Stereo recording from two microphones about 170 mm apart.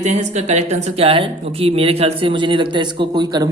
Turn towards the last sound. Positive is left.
turn(degrees=-25)  # may be behind; listen again after turning